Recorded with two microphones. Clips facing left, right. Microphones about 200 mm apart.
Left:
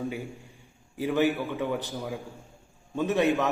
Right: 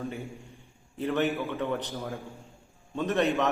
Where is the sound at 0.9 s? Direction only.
10° left (ahead or behind).